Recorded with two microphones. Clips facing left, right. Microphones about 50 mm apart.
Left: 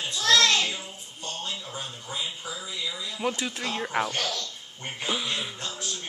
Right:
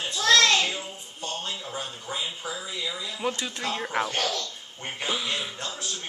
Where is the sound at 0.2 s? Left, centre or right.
Centre.